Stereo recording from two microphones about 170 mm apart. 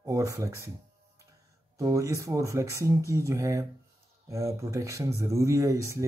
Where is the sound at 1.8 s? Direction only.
20° right (ahead or behind).